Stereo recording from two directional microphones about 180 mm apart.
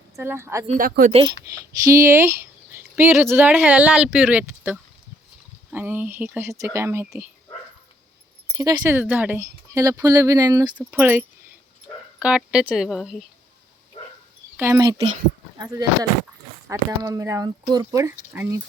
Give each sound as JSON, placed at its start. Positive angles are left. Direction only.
{"t": 0.2, "sound": "speech", "side_deg": -15}
{"t": 0.7, "sound": "speech", "side_deg": -55}
{"t": 1.1, "sound": "speech", "side_deg": -25}
{"t": 8.5, "sound": "speech", "side_deg": -20}
{"t": 9.0, "sound": "speech", "side_deg": -10}
{"t": 14.0, "sound": "dog", "side_deg": 30}
{"t": 14.5, "sound": "speech", "side_deg": -15}